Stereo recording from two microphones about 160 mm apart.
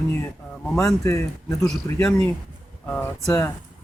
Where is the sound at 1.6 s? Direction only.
5° left (ahead or behind).